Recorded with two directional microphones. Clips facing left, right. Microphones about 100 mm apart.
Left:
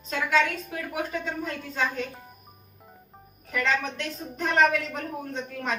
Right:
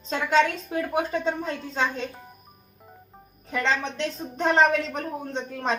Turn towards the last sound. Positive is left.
turn(degrees=-30)  # may be behind; listen again after turning